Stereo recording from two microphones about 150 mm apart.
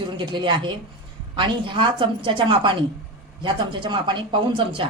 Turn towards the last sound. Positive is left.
turn(degrees=-35)  # may be behind; listen again after turning